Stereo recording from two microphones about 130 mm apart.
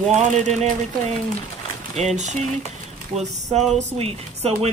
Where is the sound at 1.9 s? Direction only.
65° right (ahead or behind).